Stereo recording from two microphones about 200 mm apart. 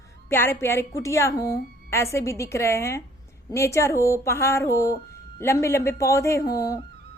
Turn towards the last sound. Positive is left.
turn(degrees=15)  # may be behind; listen again after turning